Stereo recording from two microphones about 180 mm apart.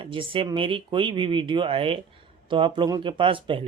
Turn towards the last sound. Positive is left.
turn(degrees=-30)  # may be behind; listen again after turning